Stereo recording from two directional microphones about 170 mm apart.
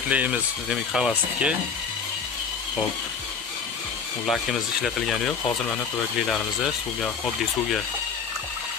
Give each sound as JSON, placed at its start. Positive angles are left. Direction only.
{"t": 0.1, "sound": "speech", "side_deg": -5}
{"t": 4.3, "sound": "speech", "side_deg": 0}